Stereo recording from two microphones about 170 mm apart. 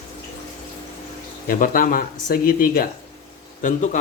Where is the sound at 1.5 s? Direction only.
55° left (ahead or behind).